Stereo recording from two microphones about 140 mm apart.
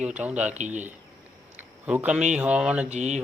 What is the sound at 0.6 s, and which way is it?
Speech, 60° right (ahead or behind).